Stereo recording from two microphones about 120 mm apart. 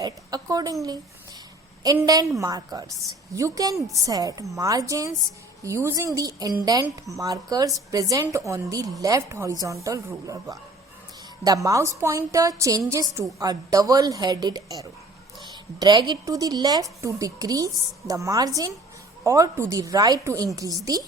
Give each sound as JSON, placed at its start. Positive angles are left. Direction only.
{"t": 0.0, "sound": "a woman's voice", "side_deg": -30}
{"t": 2.0, "sound": "a woman's voice", "side_deg": -30}